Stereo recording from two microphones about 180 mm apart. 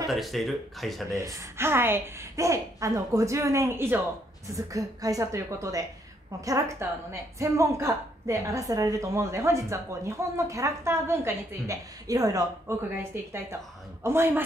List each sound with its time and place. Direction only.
0.1 s speech: centre (ahead or behind)
1.1 s a woman's voice: 15° right (ahead or behind)